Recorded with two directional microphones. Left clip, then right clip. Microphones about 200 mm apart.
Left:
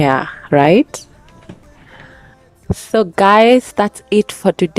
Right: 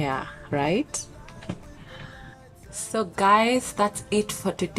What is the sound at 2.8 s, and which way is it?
Speech, 40° left (ahead or behind).